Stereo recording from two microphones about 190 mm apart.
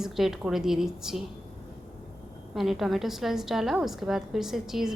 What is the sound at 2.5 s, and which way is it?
A woman's voice, centre (ahead or behind).